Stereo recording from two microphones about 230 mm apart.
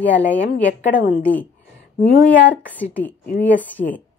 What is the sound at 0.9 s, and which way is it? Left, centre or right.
Speech, left.